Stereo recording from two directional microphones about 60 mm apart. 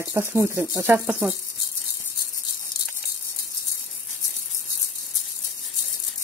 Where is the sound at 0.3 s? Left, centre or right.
Right.